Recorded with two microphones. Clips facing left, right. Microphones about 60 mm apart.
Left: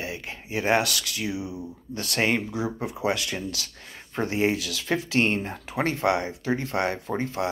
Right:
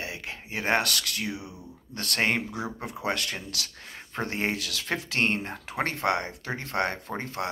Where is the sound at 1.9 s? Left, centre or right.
Right.